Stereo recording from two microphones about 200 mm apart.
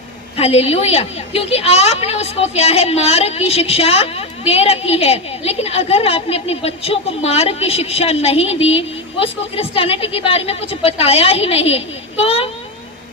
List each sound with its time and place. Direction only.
0.3 s a woman's voice: 30° left (ahead or behind)